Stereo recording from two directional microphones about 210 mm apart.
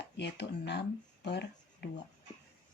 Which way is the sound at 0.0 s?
55° left (ahead or behind).